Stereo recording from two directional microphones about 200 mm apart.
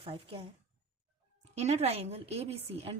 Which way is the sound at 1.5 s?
35° right (ahead or behind).